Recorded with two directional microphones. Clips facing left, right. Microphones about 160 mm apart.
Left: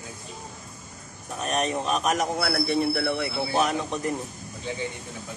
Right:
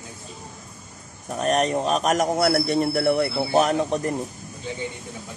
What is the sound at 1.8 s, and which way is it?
A man's voice, 40° right (ahead or behind).